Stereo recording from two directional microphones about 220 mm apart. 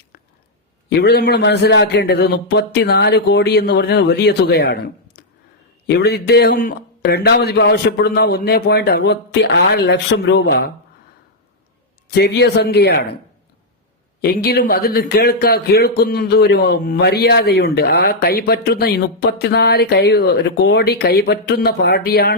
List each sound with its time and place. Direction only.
0.9 s a man's voice: 50° left (ahead or behind)
12.0 s a man's voice: 45° left (ahead or behind)
14.2 s a man's voice: 45° left (ahead or behind)